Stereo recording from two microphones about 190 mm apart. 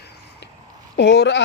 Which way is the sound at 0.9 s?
65° left (ahead or behind).